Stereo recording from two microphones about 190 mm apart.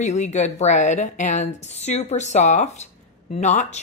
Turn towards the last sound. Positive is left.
turn(degrees=40)  # may be behind; listen again after turning